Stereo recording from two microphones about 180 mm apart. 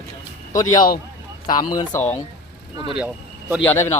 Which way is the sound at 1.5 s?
25° left (ahead or behind).